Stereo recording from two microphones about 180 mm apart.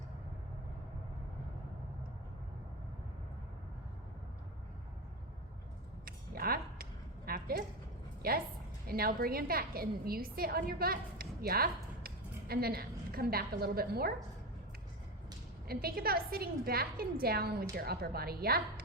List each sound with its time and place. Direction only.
6.1 s a sound: 55° right (ahead or behind)
8.9 s a woman's voice: 55° right (ahead or behind)
15.6 s a woman's voice: 60° right (ahead or behind)